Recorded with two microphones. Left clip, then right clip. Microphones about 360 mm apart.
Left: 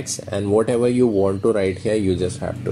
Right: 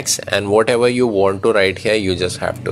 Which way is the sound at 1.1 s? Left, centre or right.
Right.